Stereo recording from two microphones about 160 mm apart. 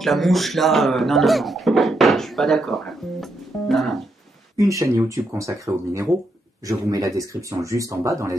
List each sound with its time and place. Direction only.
0.0 s speech: centre (ahead or behind)
4.6 s speech: 20° right (ahead or behind)